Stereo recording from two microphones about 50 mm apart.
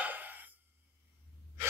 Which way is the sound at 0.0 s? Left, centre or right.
Right.